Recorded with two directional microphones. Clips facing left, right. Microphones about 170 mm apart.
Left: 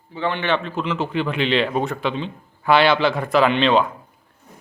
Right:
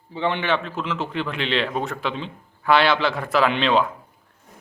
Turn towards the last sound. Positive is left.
turn(degrees=0)  # may be behind; listen again after turning